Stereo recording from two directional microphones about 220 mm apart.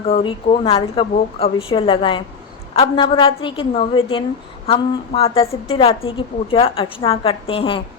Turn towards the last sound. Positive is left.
turn(degrees=25)  # may be behind; listen again after turning